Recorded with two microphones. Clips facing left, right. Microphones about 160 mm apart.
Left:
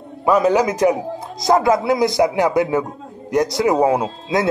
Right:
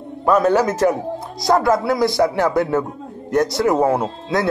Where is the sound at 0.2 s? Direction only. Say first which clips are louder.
Even; 10° left (ahead or behind).